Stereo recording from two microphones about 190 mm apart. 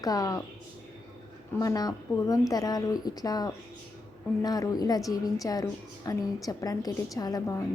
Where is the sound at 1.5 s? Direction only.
20° left (ahead or behind).